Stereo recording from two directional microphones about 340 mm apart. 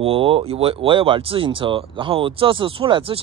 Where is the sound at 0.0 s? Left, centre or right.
Centre.